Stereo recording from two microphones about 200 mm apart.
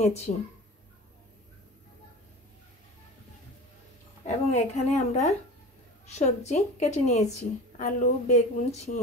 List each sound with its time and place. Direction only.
0.0 s speech: 30° left (ahead or behind)
4.5 s speech: 35° left (ahead or behind)